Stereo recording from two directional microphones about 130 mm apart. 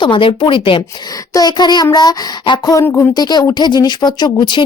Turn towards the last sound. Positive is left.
turn(degrees=40)  # may be behind; listen again after turning